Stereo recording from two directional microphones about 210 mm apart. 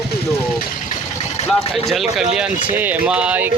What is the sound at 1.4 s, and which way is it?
Vehicle, 30° left (ahead or behind).